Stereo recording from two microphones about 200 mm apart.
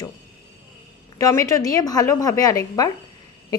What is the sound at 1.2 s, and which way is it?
A woman's voice, 15° left (ahead or behind).